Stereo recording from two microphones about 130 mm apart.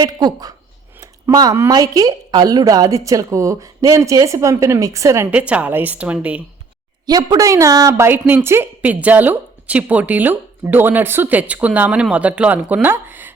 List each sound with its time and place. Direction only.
0.0 s a woman's voice: 30° right (ahead or behind)
5.3 s a woman's voice: 10° right (ahead or behind)
7.1 s a woman's voice: 30° right (ahead or behind)